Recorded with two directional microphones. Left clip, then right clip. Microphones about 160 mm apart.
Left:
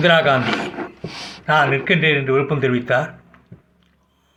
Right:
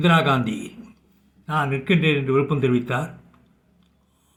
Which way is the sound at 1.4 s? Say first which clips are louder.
Left 8 dB; 40° right (ahead or behind).